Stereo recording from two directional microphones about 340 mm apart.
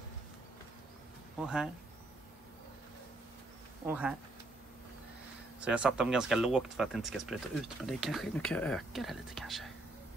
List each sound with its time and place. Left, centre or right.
1.4 s speech: centre
3.8 s speech: centre
5.6 s speech: centre